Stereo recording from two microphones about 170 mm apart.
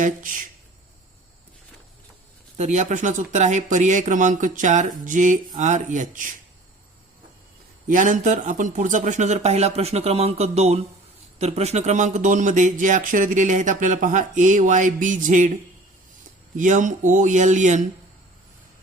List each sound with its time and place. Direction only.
0.0 s speech: 50° right (ahead or behind)
2.6 s speech: 45° right (ahead or behind)
7.9 s speech: 50° right (ahead or behind)
16.6 s speech: 45° right (ahead or behind)